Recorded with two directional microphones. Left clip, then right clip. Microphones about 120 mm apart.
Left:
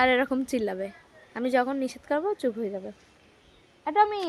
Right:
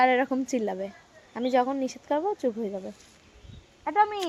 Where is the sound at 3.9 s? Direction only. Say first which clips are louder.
Left 1 dB; 35° left (ahead or behind).